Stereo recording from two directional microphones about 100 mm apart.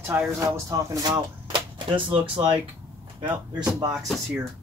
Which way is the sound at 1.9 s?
60° right (ahead or behind).